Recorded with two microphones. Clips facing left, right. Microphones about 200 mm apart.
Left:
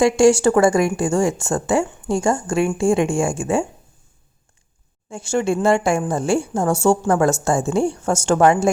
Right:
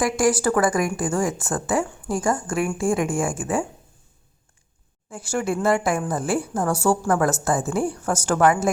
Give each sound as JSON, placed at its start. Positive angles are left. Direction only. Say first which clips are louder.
{"t": 0.0, "sound": "speech", "louder": "left 7 dB", "side_deg": 25}
{"t": 5.1, "sound": "speech", "louder": "left 5 dB", "side_deg": 25}